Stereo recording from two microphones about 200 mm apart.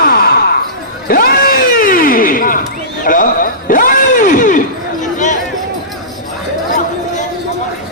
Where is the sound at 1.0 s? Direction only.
45° left (ahead or behind).